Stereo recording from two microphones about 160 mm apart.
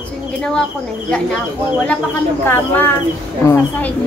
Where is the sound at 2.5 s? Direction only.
10° left (ahead or behind).